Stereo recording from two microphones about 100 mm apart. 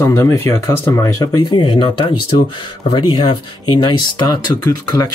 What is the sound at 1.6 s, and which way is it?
Speech, 55° left (ahead or behind).